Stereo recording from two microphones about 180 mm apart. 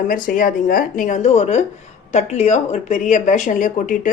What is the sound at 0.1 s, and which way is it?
A woman's voice, 50° left (ahead or behind).